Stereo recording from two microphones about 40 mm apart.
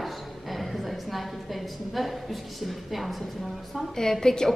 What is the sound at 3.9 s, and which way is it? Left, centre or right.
Speech, centre.